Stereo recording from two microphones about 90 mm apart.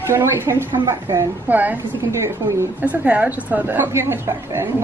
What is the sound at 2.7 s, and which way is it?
A man's voice, 15° right (ahead or behind).